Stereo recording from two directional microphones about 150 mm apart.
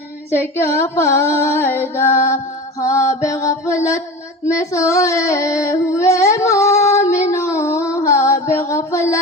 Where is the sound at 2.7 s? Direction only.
20° left (ahead or behind).